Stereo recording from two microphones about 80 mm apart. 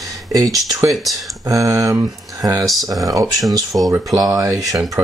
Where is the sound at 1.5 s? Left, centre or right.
Right.